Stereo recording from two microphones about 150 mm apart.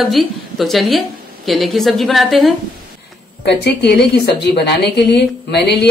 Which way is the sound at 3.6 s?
90° left.